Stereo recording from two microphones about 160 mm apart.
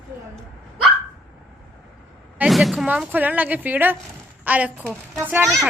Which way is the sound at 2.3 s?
5° right (ahead or behind).